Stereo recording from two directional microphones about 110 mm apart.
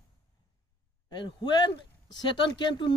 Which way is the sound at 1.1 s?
45° left (ahead or behind).